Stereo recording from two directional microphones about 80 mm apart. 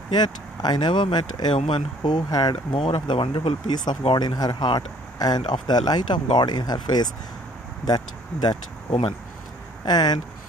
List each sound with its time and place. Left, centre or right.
0.1 s speech: left
9.8 s speech: left